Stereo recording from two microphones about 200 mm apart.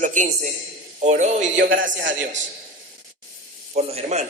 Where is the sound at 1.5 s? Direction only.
65° right (ahead or behind).